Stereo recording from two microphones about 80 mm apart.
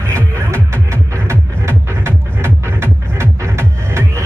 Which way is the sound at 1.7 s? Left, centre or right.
Right.